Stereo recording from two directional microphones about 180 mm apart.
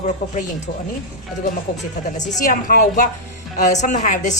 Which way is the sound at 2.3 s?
50° left (ahead or behind).